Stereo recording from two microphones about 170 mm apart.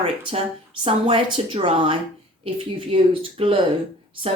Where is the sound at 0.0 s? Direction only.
35° right (ahead or behind).